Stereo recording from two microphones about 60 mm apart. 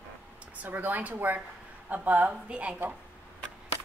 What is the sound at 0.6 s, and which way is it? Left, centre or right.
A woman's voice, right.